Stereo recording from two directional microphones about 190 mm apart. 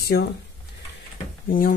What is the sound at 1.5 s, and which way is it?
Speech, 50° left (ahead or behind).